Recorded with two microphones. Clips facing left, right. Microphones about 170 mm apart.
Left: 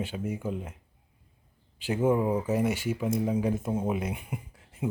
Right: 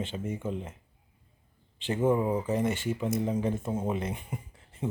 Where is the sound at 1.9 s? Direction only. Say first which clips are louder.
Left 1 dB; 5° left (ahead or behind).